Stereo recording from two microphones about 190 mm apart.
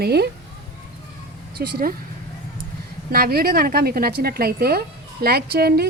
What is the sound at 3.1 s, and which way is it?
Speech, 55° right (ahead or behind).